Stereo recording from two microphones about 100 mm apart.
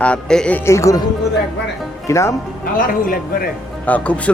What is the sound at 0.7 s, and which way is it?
Speech, 30° left (ahead or behind).